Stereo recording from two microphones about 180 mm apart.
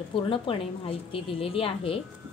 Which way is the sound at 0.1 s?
30° left (ahead or behind).